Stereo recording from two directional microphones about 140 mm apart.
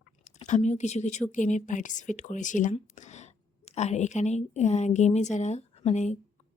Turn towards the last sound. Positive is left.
turn(degrees=55)  # may be behind; listen again after turning